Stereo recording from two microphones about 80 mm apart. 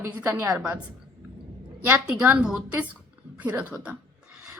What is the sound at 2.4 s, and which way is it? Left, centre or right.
A woman's voice, centre.